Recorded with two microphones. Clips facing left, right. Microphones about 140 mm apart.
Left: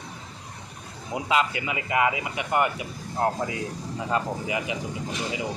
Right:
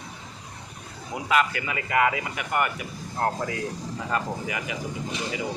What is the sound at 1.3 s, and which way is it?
Speech, 20° left (ahead or behind).